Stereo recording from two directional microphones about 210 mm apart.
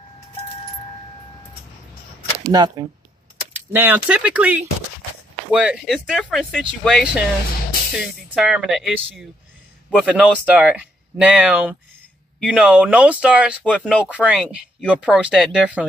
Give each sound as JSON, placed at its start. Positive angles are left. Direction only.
{"t": 2.5, "sound": "speech", "side_deg": -15}